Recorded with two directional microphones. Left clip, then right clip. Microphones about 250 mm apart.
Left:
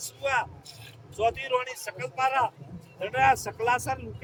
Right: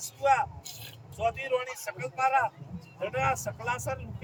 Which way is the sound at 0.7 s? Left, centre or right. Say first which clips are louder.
Right 2 dB; right.